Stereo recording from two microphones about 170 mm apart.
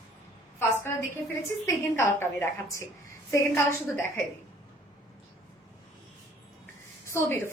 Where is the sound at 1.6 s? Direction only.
15° left (ahead or behind).